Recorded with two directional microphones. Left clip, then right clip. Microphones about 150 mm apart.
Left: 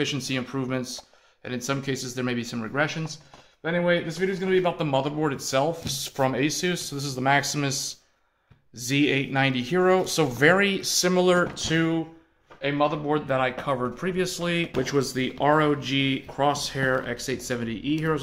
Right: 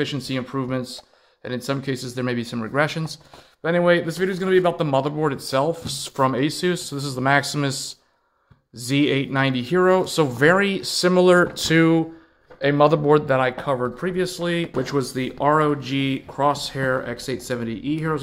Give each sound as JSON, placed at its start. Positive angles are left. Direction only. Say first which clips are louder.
{"t": 0.0, "sound": "a man's voice", "louder": "right 2 dB", "side_deg": -25}
{"t": 2.8, "sound": "a man's voice", "louder": "right 4 dB", "side_deg": -55}
{"t": 11.5, "sound": "speech", "louder": "right 7 dB", "side_deg": -55}
{"t": 12.6, "sound": "speech", "louder": "right 8 dB", "side_deg": -90}
{"t": 13.3, "sound": "speech", "louder": "right 4 dB", "side_deg": -40}